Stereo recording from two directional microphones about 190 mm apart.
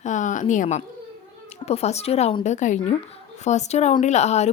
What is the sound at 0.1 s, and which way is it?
A woman's voice, 40° left (ahead or behind).